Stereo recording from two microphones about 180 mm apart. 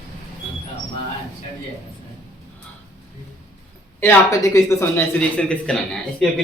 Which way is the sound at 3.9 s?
15° left (ahead or behind).